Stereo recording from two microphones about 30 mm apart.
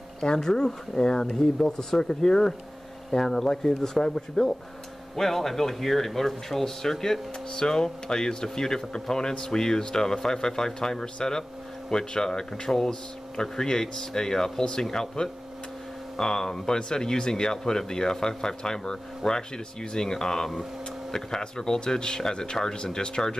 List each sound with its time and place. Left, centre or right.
0.2 s speech: left